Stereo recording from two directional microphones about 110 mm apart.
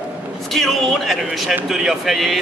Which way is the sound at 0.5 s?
Centre (ahead or behind).